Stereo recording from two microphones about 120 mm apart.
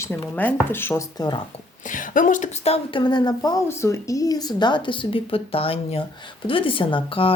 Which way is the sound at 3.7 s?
25° left (ahead or behind).